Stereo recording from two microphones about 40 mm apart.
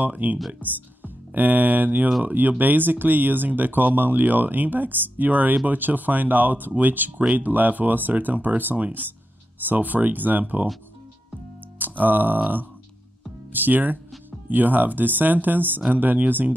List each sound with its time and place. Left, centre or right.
0.0 s speech: right
11.8 s music: right
12.4 s speech: right